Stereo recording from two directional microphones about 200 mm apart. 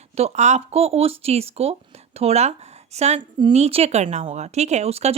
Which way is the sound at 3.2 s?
25° right (ahead or behind).